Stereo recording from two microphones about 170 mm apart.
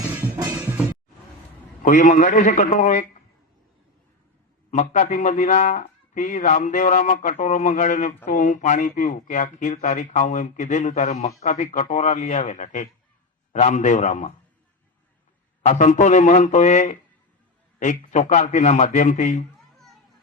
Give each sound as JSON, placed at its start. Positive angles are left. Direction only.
{"t": 0.3, "sound": "music", "side_deg": -20}
{"t": 1.8, "sound": "a man's voice", "side_deg": 50}
{"t": 4.7, "sound": "a man's voice", "side_deg": 45}
{"t": 15.6, "sound": "a man's voice", "side_deg": 45}